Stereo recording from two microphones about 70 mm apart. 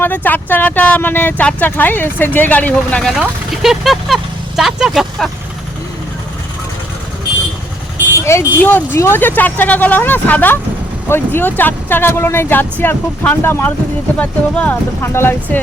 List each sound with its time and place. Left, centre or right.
0.0 s speech: left
3.1 s speech: centre
8.2 s speech: left
8.5 s speech: left
14.2 s speech: left
15.0 s speech: left